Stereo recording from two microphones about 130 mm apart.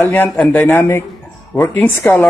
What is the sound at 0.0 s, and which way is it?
Speech, 15° left (ahead or behind).